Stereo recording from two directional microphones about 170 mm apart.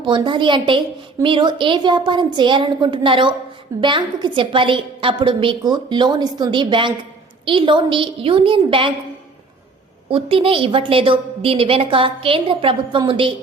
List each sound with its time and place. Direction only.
0.0 s a woman's voice: 30° right (ahead or behind)
10.1 s a woman's voice: 30° right (ahead or behind)